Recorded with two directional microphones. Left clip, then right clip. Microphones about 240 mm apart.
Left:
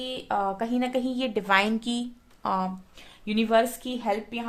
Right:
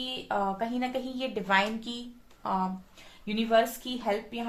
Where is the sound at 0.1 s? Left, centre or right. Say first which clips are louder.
Left 3 dB; left.